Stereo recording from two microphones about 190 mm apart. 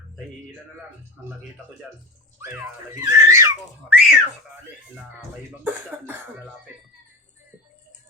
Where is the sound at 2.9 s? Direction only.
15° right (ahead or behind).